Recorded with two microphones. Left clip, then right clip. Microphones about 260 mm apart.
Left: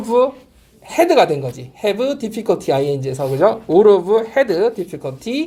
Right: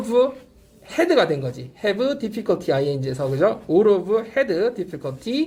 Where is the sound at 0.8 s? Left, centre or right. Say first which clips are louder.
Left 5 dB; centre.